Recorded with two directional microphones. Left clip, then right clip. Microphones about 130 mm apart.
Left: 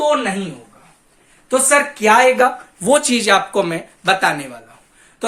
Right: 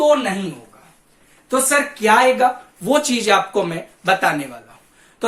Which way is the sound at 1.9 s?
90° left.